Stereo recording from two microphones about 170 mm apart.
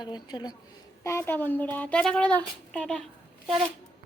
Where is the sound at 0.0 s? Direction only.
25° left (ahead or behind).